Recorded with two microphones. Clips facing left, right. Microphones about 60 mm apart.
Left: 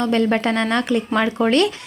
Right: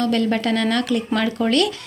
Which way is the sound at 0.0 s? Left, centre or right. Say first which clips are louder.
Left 2 dB; left.